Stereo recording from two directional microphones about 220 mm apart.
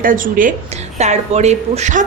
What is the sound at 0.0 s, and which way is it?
A woman's voice, 40° right (ahead or behind).